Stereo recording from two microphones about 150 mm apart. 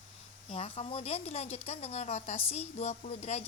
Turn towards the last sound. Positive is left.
turn(degrees=45)  # may be behind; listen again after turning